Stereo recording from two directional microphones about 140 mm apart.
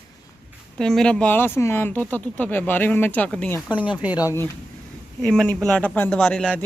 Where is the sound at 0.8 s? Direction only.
5° left (ahead or behind).